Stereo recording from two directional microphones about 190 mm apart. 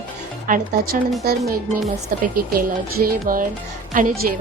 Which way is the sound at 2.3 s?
50° right (ahead or behind).